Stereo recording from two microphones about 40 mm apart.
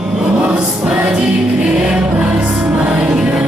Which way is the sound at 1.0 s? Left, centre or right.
Right.